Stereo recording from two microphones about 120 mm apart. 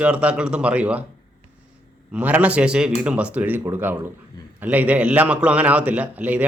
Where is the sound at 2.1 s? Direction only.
10° right (ahead or behind).